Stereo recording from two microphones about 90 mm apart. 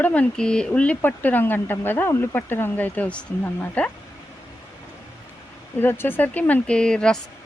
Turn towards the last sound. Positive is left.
turn(degrees=10)  # may be behind; listen again after turning